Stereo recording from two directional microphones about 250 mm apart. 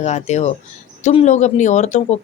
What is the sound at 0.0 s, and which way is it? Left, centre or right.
Speech, left.